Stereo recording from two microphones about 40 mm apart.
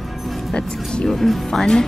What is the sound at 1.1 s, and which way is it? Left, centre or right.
Speech, centre.